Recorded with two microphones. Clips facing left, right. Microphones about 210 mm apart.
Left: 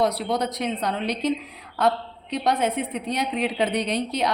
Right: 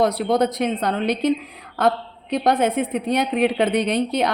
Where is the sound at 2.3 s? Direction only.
50° right (ahead or behind).